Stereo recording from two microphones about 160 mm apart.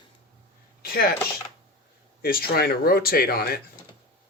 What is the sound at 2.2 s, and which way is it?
Speech, 70° left (ahead or behind).